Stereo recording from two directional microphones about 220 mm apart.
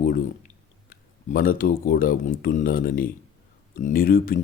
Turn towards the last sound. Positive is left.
turn(degrees=40)  # may be behind; listen again after turning